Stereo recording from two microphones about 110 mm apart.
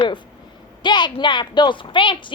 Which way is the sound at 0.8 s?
45° left (ahead or behind).